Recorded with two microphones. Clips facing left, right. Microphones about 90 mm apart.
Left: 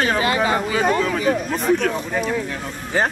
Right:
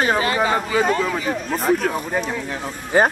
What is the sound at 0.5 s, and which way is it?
A man's voice, centre (ahead or behind).